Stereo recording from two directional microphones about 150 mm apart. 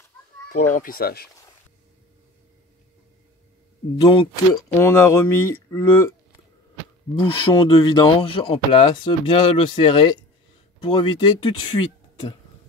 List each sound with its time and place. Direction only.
0.5 s speech: 65° left (ahead or behind); by 1.3 s 90° left
4.0 s speech: 35° left (ahead or behind)
4.7 s speech: 20° left (ahead or behind)
7.2 s speech: 30° left (ahead or behind)